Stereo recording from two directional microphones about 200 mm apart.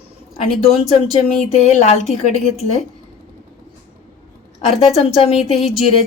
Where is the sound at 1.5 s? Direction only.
35° left (ahead or behind).